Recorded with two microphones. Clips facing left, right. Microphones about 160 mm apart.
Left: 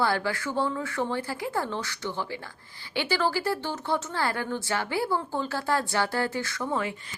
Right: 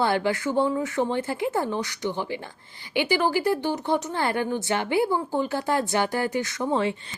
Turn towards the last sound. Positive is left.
turn(degrees=-25)  # may be behind; listen again after turning